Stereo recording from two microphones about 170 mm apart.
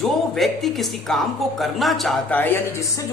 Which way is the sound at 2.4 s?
15° left (ahead or behind).